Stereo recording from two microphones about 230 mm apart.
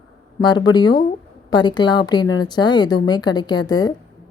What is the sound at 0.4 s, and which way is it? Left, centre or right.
A woman's voice, centre.